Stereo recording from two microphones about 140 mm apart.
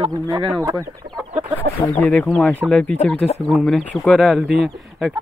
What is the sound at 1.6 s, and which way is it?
Speech, 10° left (ahead or behind).